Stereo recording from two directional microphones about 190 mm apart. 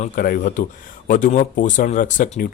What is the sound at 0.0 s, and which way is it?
Speech, 45° left (ahead or behind).